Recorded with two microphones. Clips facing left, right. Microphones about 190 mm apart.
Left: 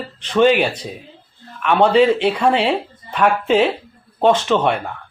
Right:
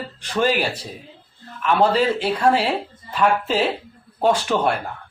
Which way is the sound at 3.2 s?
60° left (ahead or behind).